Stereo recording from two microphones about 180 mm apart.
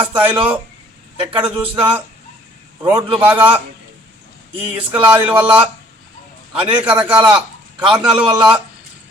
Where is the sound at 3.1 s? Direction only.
10° right (ahead or behind).